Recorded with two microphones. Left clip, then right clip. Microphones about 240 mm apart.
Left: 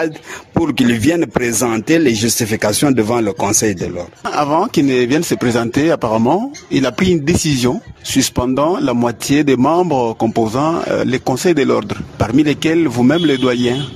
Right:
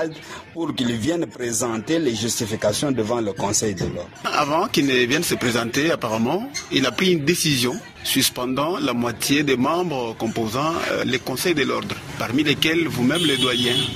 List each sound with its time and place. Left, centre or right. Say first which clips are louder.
0.7 s speech: left 8 dB; left